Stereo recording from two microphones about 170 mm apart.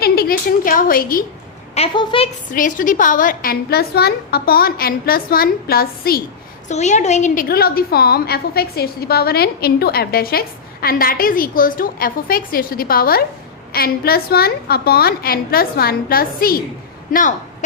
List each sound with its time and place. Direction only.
0.0 s speech: 60° left (ahead or behind)
1.7 s a woman's voice: 30° left (ahead or behind)
2.5 s a woman's voice: 50° left (ahead or behind)
6.7 s a woman's voice: 45° left (ahead or behind)